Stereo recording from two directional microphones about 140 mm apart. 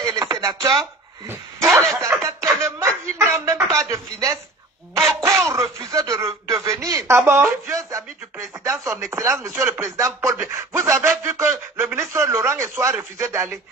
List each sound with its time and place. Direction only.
0.0 s a sound: 25° right (ahead or behind)
3.7 s speech: 20° right (ahead or behind)
5.5 s speech: 20° right (ahead or behind)